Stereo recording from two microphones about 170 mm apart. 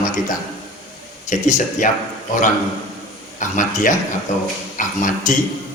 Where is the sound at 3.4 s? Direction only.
50° left (ahead or behind).